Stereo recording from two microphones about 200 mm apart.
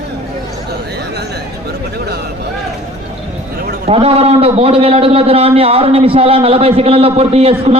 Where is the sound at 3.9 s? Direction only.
30° right (ahead or behind).